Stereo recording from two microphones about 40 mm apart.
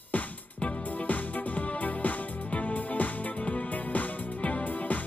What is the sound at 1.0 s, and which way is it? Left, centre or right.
Music, left.